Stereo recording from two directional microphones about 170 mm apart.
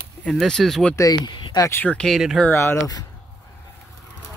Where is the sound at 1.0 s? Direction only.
25° left (ahead or behind); by 2.4 s centre (ahead or behind).